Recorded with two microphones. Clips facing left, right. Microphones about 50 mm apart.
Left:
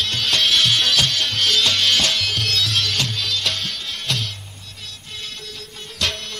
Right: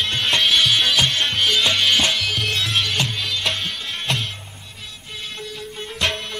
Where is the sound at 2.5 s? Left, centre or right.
Centre.